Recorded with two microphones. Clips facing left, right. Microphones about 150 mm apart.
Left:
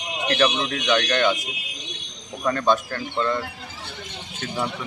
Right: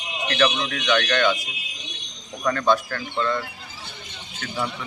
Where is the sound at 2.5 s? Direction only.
20° left (ahead or behind).